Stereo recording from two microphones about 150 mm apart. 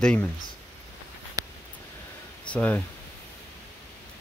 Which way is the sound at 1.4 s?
25° right (ahead or behind).